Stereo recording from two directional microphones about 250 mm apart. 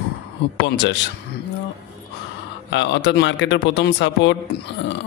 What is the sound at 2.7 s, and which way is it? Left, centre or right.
Speech, left.